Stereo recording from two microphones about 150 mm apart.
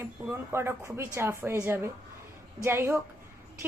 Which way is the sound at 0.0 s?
15° right (ahead or behind).